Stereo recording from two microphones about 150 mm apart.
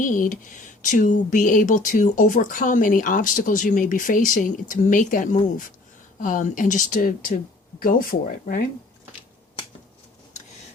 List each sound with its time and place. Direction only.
0.0 s speech: 60° left (ahead or behind)